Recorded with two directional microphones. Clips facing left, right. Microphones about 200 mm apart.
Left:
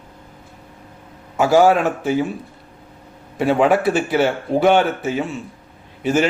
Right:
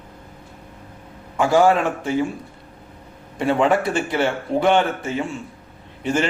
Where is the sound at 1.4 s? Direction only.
5° left (ahead or behind).